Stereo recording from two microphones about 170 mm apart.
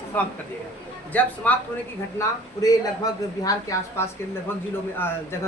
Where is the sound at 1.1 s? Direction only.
10° left (ahead or behind).